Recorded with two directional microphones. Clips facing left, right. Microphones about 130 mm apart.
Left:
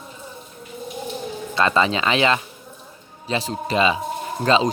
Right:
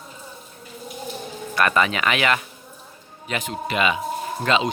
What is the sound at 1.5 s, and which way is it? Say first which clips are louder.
Speech: left 1 dB; 25° left (ahead or behind).